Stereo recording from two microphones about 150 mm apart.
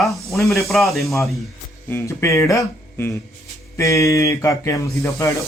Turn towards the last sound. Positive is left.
turn(degrees=20)  # may be behind; listen again after turning